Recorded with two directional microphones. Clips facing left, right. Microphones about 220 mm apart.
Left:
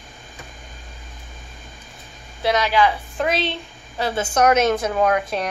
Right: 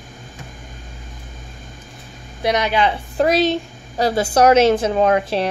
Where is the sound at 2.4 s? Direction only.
20° right (ahead or behind).